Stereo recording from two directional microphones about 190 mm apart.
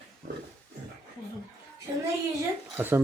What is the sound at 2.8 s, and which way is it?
Speech, 10° right (ahead or behind).